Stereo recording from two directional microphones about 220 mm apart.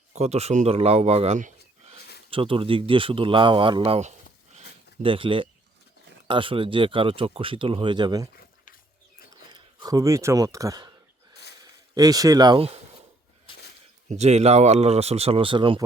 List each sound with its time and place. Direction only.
0.1 s a man's voice: 30° right (ahead or behind)
9.5 s speech: 15° right (ahead or behind)
11.9 s speech: 15° right (ahead or behind)
14.1 s speech: 30° right (ahead or behind)